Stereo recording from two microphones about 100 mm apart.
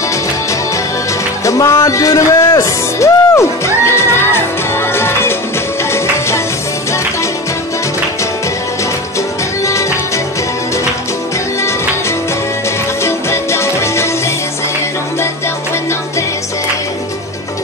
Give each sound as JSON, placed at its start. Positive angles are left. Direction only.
{"t": 1.4, "sound": "speech", "side_deg": 35}
{"t": 5.9, "sound": "music", "side_deg": 25}
{"t": 9.7, "sound": "music", "side_deg": 30}
{"t": 13.0, "sound": "music", "side_deg": 25}